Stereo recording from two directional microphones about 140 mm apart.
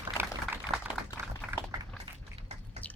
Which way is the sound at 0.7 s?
50° right (ahead or behind).